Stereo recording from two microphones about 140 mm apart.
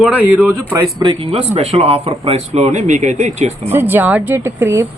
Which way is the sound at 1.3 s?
50° right (ahead or behind).